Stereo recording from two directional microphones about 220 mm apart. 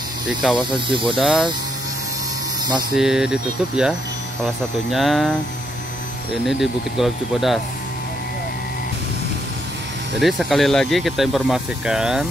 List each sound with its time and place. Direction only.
0.3 s speech: 5° right (ahead or behind)
0.6 s speech: 20° right (ahead or behind)
1.1 s speech: 5° right (ahead or behind)
3.0 s speech: centre (ahead or behind)
4.9 s speech: centre (ahead or behind)
6.4 s speech: centre (ahead or behind)
10.2 s speech: centre (ahead or behind)